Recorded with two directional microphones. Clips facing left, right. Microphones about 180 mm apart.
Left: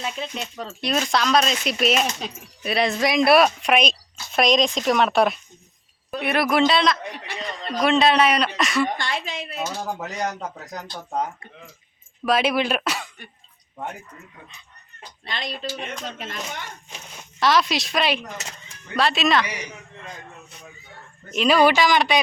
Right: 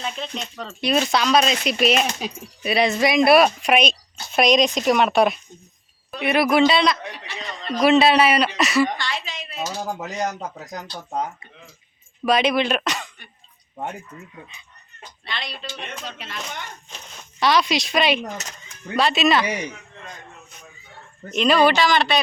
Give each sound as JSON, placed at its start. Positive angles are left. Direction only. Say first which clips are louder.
{"t": 0.0, "sound": "speech", "louder": "even", "side_deg": 5}
{"t": 9.0, "sound": "a woman's voice", "louder": "left 2 dB", "side_deg": 50}
{"t": 10.0, "sound": "speech", "louder": "right 3 dB", "side_deg": -20}
{"t": 12.2, "sound": "speech", "louder": "right 2 dB", "side_deg": 5}
{"t": 15.3, "sound": "a woman's voice", "louder": "left 3 dB", "side_deg": 45}
{"t": 16.4, "sound": "speech", "louder": "left 1 dB", "side_deg": 10}
{"t": 21.2, "sound": "speech", "louder": "even", "side_deg": 5}